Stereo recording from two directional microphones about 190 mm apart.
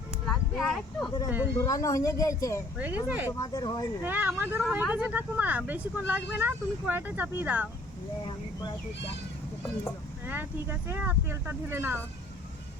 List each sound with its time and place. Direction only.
0.3 s a sound: centre (ahead or behind)
1.5 s speech: 15° left (ahead or behind)
2.7 s speech: 10° right (ahead or behind)
3.3 s speech: 20° left (ahead or behind)
4.0 s speech: 10° right (ahead or behind)
10.2 s speech: 10° right (ahead or behind)